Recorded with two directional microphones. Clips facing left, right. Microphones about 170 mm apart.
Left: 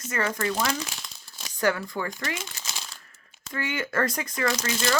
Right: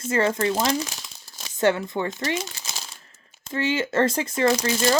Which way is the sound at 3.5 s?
25° right (ahead or behind).